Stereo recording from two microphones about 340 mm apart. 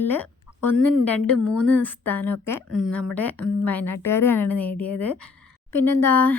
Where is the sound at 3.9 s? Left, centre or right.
Left.